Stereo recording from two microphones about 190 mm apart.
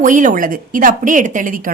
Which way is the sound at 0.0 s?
40° right (ahead or behind).